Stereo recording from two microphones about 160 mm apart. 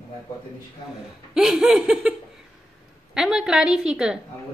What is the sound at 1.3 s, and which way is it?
Speech, 5° right (ahead or behind).